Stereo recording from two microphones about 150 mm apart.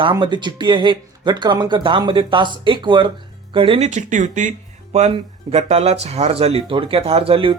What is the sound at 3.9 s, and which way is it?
Speech, 55° right (ahead or behind).